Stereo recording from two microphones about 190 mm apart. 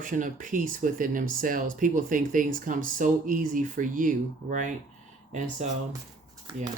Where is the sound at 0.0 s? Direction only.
45° right (ahead or behind).